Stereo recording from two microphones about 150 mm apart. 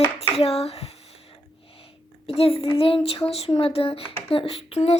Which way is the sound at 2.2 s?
40° left (ahead or behind).